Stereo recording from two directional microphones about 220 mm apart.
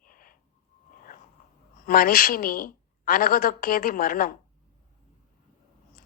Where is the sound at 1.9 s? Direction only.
40° left (ahead or behind).